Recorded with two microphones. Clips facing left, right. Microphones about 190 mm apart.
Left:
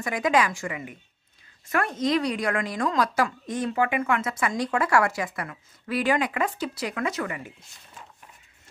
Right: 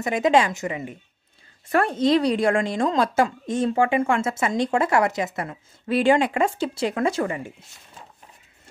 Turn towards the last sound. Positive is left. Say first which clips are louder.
# right 6 dB
turn(degrees=-30)  # may be behind; listen again after turning